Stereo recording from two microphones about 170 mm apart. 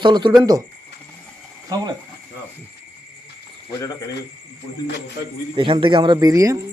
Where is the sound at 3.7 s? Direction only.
25° left (ahead or behind).